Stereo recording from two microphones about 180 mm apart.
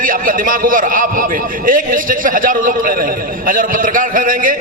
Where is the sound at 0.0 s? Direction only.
50° right (ahead or behind).